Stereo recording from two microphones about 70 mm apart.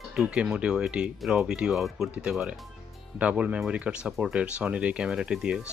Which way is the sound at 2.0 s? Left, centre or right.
Right.